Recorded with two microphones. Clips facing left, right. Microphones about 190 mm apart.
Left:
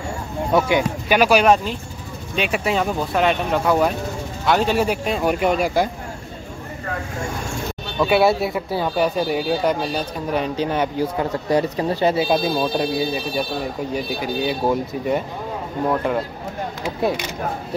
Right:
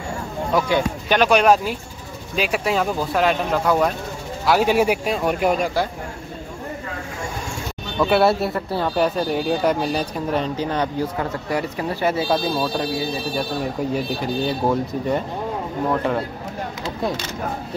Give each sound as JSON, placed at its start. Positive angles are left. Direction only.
{"t": 0.6, "sound": "speech", "side_deg": 15}
{"t": 4.5, "sound": "speech", "side_deg": -10}
{"t": 5.1, "sound": "speech", "side_deg": 0}
{"t": 8.0, "sound": "speech", "side_deg": 0}
{"t": 10.4, "sound": "speech", "side_deg": 15}
{"t": 14.0, "sound": "speech", "side_deg": 5}
{"t": 16.8, "sound": "speech", "side_deg": 15}